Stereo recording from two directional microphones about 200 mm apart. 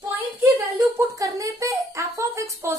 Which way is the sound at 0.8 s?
15° right (ahead or behind).